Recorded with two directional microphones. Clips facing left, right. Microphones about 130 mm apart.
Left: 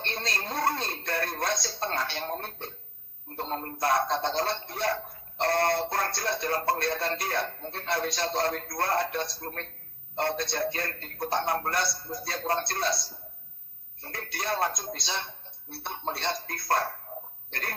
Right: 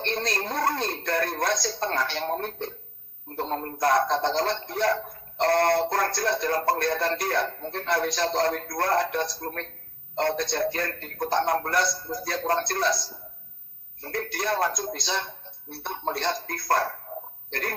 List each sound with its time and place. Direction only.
0.1 s music: 40° right (ahead or behind)
3.6 s a man's voice: 40° right (ahead or behind)
4.8 s music: 40° right (ahead or behind)
10.2 s a man's voice: 40° right (ahead or behind)
14.0 s music: 40° right (ahead or behind)